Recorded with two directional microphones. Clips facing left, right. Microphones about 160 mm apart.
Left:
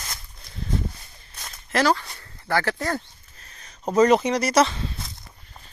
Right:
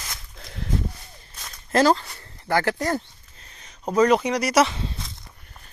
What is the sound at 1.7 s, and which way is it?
Speech, 30° right (ahead or behind).